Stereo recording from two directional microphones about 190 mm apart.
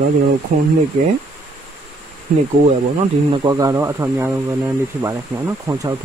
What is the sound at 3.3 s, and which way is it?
Speech, 20° right (ahead or behind).